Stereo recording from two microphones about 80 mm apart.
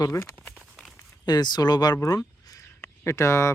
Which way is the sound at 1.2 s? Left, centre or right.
Left.